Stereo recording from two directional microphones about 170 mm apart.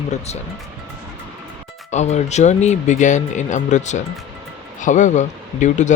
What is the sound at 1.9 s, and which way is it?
Speech, 45° left (ahead or behind).